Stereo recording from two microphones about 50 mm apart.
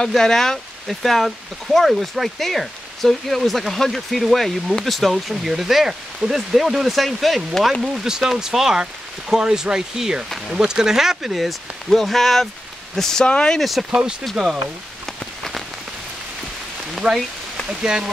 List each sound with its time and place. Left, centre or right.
0.0 s speech: centre
13.2 s speech: left
13.6 s speech: centre
15.1 s rain on surface: centre
17.0 s speech: right
17.6 s speech: centre